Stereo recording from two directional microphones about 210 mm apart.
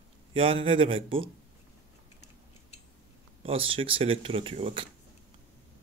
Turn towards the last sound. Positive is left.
turn(degrees=-25)  # may be behind; listen again after turning